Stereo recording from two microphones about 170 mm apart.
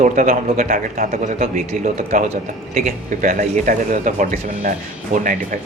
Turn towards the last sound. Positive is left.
turn(degrees=-45)  # may be behind; listen again after turning